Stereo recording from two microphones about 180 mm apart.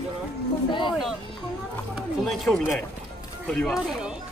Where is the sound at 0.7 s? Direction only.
25° left (ahead or behind).